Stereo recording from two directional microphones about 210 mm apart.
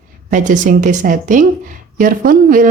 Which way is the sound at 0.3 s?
40° right (ahead or behind).